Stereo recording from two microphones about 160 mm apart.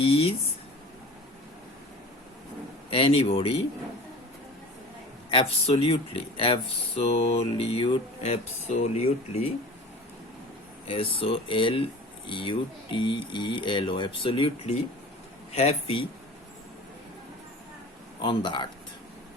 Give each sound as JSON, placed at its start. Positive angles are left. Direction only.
{"t": 0.0, "sound": "a sound", "side_deg": 35}
{"t": 2.9, "sound": "speech", "side_deg": 35}
{"t": 5.3, "sound": "speech", "side_deg": 35}
{"t": 10.8, "sound": "speech", "side_deg": 35}
{"t": 18.2, "sound": "speech", "side_deg": 30}